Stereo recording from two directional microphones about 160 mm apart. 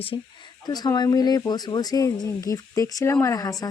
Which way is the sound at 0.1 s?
30° left (ahead or behind).